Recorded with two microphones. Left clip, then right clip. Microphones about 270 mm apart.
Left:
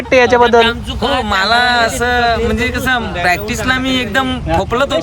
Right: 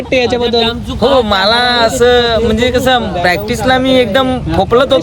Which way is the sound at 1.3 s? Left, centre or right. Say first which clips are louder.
Right 2 dB; centre.